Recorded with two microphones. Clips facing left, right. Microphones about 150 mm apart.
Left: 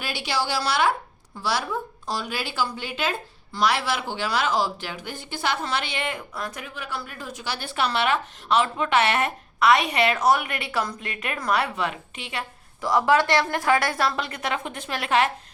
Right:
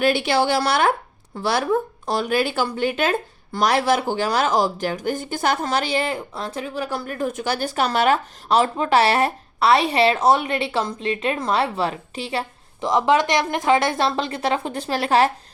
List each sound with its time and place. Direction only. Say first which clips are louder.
0.0 s speech: right 9 dB; 55° right (ahead or behind); by 12.9 s 30° right (ahead or behind)
12.9 s a woman's voice: right 2 dB; 20° right (ahead or behind)